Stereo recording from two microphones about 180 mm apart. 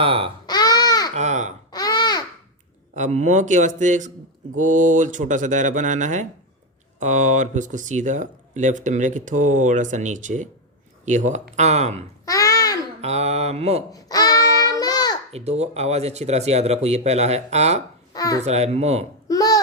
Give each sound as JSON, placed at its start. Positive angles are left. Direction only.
{"t": 0.0, "sound": "speech", "side_deg": -30}
{"t": 0.4, "sound": "a sound", "side_deg": 20}
{"t": 1.1, "sound": "speech", "side_deg": -40}
{"t": 1.7, "sound": "babbling", "side_deg": 20}
{"t": 2.9, "sound": "speech", "side_deg": -40}
{"t": 12.2, "sound": "babbling", "side_deg": 20}
{"t": 13.0, "sound": "speech", "side_deg": -35}
{"t": 13.9, "sound": "babbling", "side_deg": 20}
{"t": 15.3, "sound": "speech", "side_deg": -35}
{"t": 18.1, "sound": "a child's voice", "side_deg": 20}
{"t": 18.4, "sound": "speech", "side_deg": -35}
{"t": 19.3, "sound": "a sound", "side_deg": 20}